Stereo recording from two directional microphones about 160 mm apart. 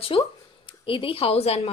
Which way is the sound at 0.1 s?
35° left (ahead or behind).